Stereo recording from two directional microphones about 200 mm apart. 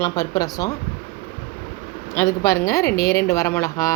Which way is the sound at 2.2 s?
15° left (ahead or behind).